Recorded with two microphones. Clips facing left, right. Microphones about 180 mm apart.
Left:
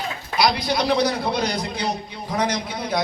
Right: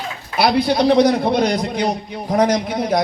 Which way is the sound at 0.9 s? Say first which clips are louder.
Right 7 dB; 50° right (ahead or behind).